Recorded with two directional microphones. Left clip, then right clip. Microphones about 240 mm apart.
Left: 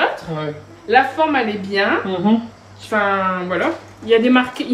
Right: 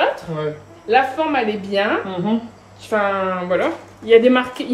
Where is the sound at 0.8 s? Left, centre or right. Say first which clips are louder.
Left 2 dB; centre.